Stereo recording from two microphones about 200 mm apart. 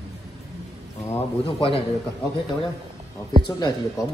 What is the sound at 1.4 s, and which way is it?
Speech, 25° left (ahead or behind).